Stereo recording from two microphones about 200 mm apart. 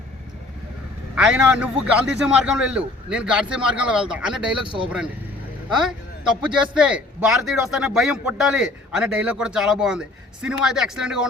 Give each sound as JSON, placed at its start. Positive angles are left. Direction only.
{"t": 1.1, "sound": "a man's voice", "side_deg": -5}
{"t": 4.6, "sound": "speech", "side_deg": -25}
{"t": 5.7, "sound": "a man's voice", "side_deg": -5}